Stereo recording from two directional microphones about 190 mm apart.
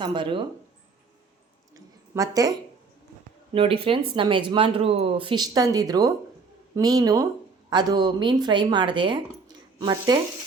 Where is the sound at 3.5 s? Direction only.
30° right (ahead or behind).